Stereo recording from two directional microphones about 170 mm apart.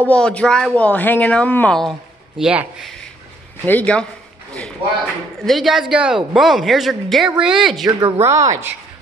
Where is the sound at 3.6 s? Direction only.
10° left (ahead or behind).